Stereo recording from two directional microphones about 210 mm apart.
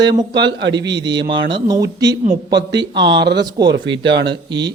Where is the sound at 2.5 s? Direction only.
55° right (ahead or behind).